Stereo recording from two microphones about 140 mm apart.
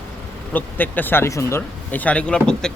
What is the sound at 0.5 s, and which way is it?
Speech, 15° left (ahead or behind).